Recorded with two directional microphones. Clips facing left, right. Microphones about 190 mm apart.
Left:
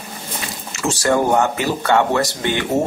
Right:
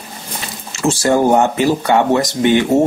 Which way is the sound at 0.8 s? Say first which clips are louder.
Right 4 dB; 25° right (ahead or behind).